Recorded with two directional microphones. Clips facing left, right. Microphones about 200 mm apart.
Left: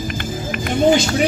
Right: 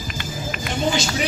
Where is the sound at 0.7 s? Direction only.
55° left (ahead or behind).